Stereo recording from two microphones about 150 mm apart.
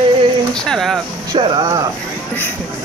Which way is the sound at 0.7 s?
Centre (ahead or behind).